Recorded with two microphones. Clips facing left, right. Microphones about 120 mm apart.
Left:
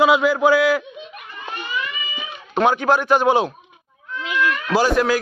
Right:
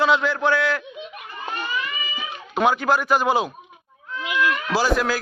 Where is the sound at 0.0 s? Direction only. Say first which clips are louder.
Left 4 dB; 5° left (ahead or behind).